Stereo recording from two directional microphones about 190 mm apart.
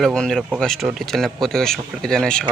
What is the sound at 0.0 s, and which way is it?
Speech, 5° left (ahead or behind).